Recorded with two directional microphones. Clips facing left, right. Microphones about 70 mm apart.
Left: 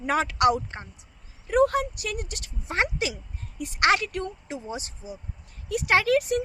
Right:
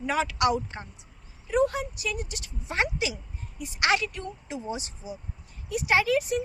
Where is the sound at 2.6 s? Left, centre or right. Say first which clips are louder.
Left 1 dB; left.